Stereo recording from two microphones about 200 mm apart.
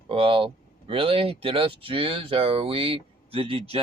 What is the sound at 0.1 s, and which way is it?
Speech, 25° right (ahead or behind).